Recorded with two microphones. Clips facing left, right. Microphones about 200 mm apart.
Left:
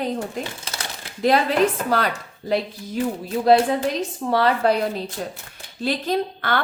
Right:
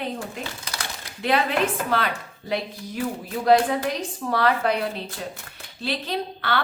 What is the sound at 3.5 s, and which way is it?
A woman's voice, 30° left (ahead or behind).